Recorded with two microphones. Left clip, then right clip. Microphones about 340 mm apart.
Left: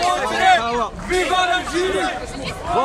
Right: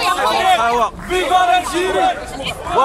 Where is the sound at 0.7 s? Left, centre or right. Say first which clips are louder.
Right 6 dB; right.